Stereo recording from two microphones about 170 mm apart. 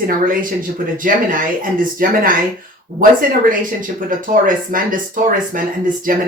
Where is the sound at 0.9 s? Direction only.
55° right (ahead or behind).